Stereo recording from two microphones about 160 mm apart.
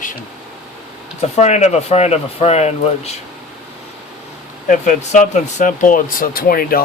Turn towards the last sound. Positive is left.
turn(degrees=65)  # may be behind; listen again after turning